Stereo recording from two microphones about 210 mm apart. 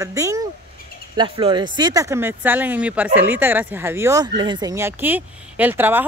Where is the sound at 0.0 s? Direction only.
15° right (ahead or behind).